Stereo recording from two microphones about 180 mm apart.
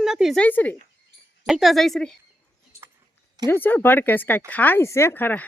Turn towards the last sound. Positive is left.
turn(degrees=10)  # may be behind; listen again after turning